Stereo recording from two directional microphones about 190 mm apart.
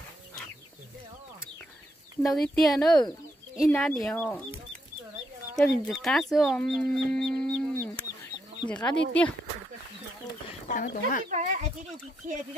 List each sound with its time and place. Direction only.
2.2 s speech: centre (ahead or behind)
5.6 s speech: centre (ahead or behind)
10.7 s speech: 45° left (ahead or behind)
11.2 s a child's voice: 40° right (ahead or behind)